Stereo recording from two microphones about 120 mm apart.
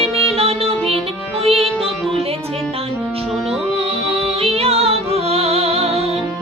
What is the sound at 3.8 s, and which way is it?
Music, 55° right (ahead or behind).